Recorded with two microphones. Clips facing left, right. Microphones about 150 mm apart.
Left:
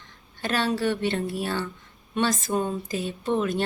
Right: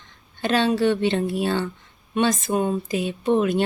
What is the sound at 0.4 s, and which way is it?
A woman's voice, 20° right (ahead or behind).